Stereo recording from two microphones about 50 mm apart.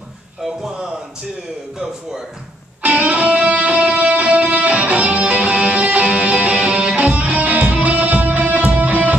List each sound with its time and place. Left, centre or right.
0.4 s speech: centre
2.8 s music: right